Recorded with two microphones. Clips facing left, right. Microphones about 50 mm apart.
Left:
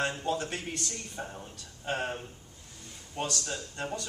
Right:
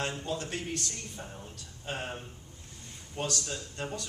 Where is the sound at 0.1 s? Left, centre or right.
Left.